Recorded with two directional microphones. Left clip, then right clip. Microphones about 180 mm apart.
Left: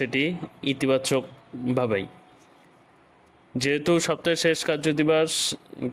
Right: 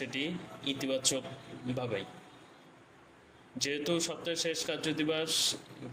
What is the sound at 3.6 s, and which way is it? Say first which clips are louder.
Speech: left 10 dB; 45° left (ahead or behind).